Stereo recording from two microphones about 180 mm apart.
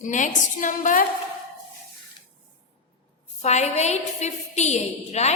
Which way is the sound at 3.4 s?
40° left (ahead or behind).